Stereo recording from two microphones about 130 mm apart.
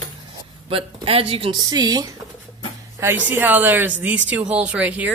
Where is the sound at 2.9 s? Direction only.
20° right (ahead or behind).